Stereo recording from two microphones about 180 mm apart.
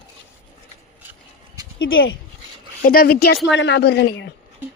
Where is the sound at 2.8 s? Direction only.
55° left (ahead or behind).